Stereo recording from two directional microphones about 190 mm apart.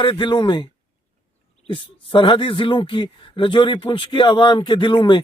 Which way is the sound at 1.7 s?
25° left (ahead or behind).